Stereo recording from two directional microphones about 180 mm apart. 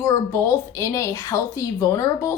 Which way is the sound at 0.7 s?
15° left (ahead or behind).